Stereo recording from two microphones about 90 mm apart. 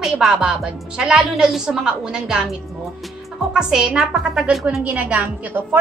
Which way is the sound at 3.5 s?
10° right (ahead or behind).